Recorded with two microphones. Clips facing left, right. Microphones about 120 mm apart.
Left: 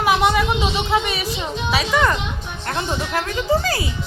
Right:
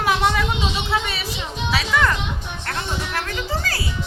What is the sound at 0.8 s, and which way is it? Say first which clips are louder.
A woman's voice: left 4 dB; 15° left (ahead or behind).